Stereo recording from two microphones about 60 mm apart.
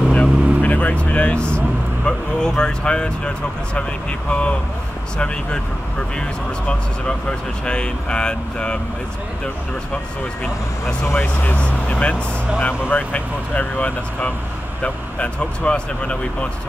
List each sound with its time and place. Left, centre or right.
0.1 s vehicle: left
2.0 s speech: centre
11.1 s speech: left